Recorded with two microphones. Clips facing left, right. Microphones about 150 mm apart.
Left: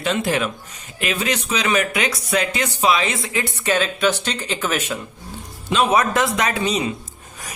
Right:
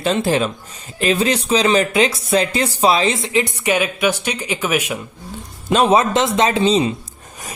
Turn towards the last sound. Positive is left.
turn(degrees=-25)  # may be behind; listen again after turning